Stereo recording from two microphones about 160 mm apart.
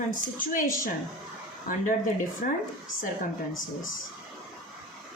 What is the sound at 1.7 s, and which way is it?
Speech, 55° left (ahead or behind).